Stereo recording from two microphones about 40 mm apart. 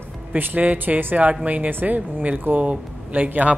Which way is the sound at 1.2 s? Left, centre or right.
Right.